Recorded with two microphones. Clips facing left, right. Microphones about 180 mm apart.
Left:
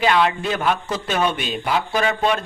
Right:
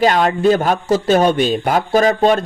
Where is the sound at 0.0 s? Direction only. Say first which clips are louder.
Right 5 dB; 40° right (ahead or behind).